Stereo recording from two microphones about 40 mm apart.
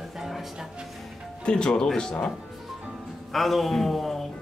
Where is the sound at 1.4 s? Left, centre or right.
Left.